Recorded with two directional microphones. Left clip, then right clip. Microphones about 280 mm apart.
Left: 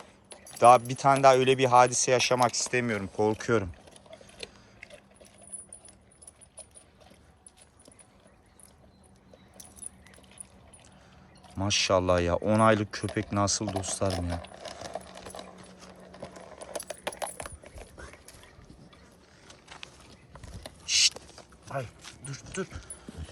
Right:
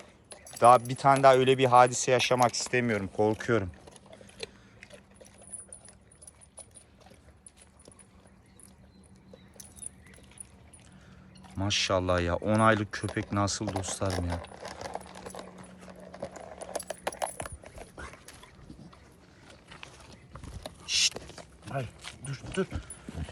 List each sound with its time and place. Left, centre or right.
0.3 s speech: centre
11.4 s speech: centre
14.1 s keys jangling: centre
20.6 s mechanisms: centre
21.2 s a sound: right